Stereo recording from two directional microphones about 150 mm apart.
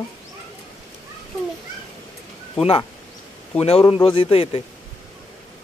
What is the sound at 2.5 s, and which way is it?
Speech, 40° left (ahead or behind).